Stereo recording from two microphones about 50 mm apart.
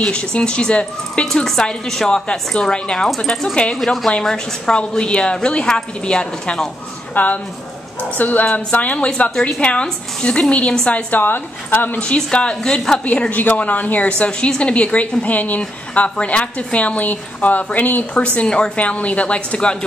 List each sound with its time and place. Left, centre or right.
0.0 s a woman's voice: left
7.2 s speech: left
8.5 s a woman's voice: left
11.1 s speech: left
12.0 s a woman's voice: left
13.3 s a woman's voice: left
18.1 s a woman's voice: left